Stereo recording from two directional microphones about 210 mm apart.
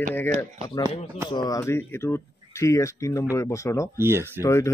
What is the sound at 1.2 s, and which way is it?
Speech, 20° left (ahead or behind).